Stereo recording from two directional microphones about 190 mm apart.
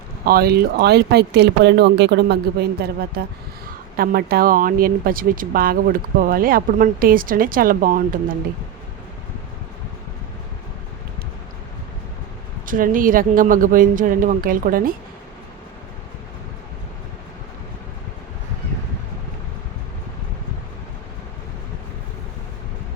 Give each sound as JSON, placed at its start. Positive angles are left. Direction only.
{"t": 0.3, "sound": "speech", "side_deg": -55}
{"t": 12.6, "sound": "speech", "side_deg": -45}